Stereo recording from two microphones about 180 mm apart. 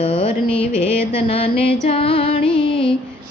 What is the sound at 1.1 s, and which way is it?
Music, 30° left (ahead or behind).